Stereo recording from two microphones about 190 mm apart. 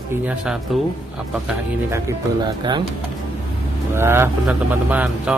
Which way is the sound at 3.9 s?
15° right (ahead or behind).